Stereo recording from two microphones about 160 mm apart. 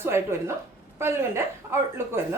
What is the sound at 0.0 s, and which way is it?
A woman's voice, 15° right (ahead or behind).